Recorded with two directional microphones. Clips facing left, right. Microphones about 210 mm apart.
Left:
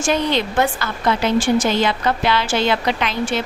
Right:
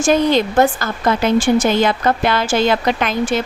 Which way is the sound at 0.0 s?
45° right (ahead or behind).